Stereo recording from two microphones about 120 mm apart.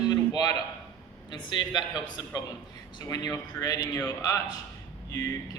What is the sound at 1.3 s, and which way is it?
A man's voice, 40° left (ahead or behind).